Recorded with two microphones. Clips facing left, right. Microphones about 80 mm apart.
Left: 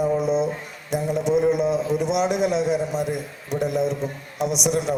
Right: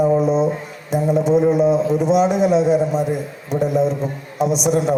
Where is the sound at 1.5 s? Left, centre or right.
Right.